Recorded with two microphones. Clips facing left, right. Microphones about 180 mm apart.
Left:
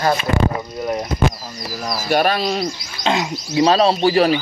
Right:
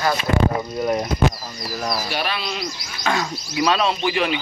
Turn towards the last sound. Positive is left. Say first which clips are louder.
# left 7 dB
turn(degrees=35)  # may be behind; listen again after turning